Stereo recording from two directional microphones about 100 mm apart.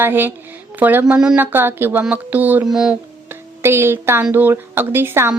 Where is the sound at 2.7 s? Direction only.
5° right (ahead or behind).